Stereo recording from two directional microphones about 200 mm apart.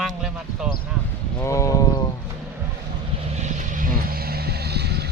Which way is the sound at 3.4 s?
40° right (ahead or behind).